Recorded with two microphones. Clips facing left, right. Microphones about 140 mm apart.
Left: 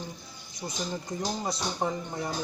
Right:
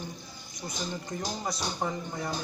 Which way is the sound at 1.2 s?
15° left (ahead or behind).